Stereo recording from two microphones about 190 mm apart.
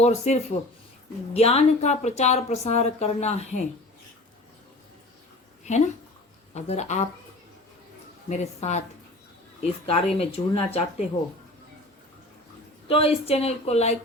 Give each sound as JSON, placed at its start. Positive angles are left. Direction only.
{"t": 0.0, "sound": "a woman's voice", "side_deg": 35}
{"t": 5.7, "sound": "a woman's voice", "side_deg": 40}
{"t": 8.3, "sound": "a woman's voice", "side_deg": 35}
{"t": 12.9, "sound": "a woman's voice", "side_deg": 30}